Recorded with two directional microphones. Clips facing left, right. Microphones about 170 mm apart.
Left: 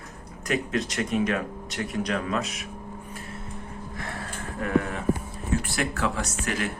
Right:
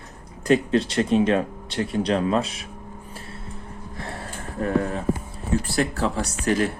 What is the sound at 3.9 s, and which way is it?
Gasp, 30° right (ahead or behind).